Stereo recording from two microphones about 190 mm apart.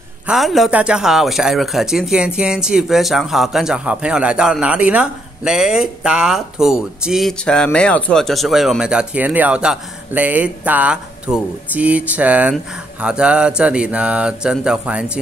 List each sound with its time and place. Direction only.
0.3 s speech: centre (ahead or behind)